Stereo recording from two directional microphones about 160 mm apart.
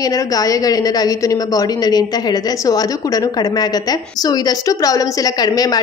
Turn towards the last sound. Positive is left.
turn(degrees=25)  # may be behind; listen again after turning